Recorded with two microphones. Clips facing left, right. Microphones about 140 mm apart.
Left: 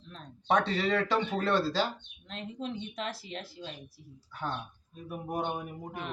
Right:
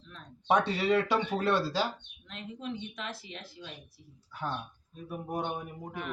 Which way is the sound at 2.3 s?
35° left (ahead or behind).